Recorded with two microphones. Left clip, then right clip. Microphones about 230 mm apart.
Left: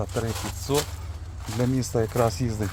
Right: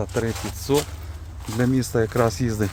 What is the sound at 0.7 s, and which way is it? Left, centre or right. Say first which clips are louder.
Speech: right 4 dB; centre.